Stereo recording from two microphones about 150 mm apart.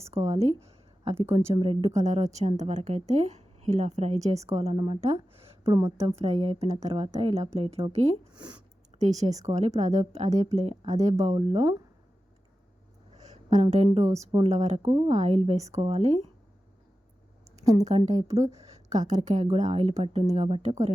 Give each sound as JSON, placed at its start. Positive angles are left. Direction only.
{"t": 0.0, "sound": "a sound", "side_deg": -45}
{"t": 1.5, "sound": "a woman's voice", "side_deg": -40}
{"t": 6.2, "sound": "a woman's voice", "side_deg": -45}
{"t": 8.3, "sound": "speech", "side_deg": -30}
{"t": 8.9, "sound": "a woman's voice", "side_deg": -50}
{"t": 13.1, "sound": "a woman's voice", "side_deg": -50}
{"t": 17.6, "sound": "a woman's voice", "side_deg": -20}
{"t": 17.8, "sound": "a woman's voice", "side_deg": -50}
{"t": 18.4, "sound": "a sound", "side_deg": -20}
{"t": 19.0, "sound": "a woman's voice", "side_deg": -55}